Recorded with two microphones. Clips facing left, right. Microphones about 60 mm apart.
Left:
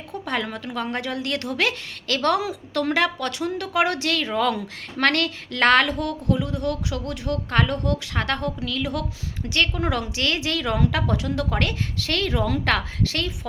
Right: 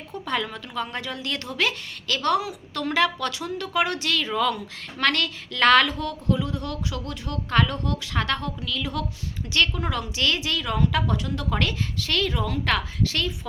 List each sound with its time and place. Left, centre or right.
0.3 s a woman's voice: left
2.9 s a woman's voice: left
4.9 s a woman's voice: left